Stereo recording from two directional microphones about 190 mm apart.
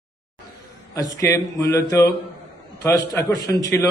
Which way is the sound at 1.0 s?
15° left (ahead or behind).